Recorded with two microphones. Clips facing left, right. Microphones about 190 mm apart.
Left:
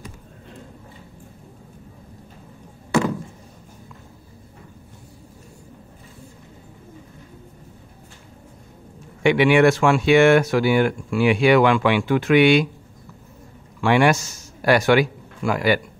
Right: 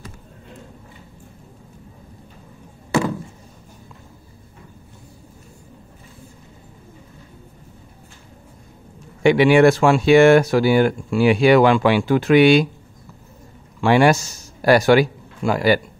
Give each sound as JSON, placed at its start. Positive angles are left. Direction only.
{"t": 9.2, "sound": "speech", "side_deg": -35}
{"t": 13.7, "sound": "a man's voice", "side_deg": -35}